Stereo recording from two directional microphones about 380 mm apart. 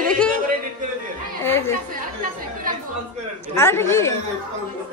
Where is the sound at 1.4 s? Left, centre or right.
Centre.